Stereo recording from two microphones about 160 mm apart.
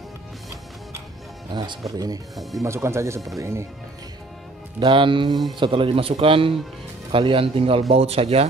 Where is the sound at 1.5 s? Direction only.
30° right (ahead or behind).